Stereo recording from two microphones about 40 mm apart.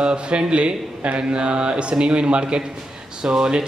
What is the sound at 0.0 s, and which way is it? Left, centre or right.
Speech, right.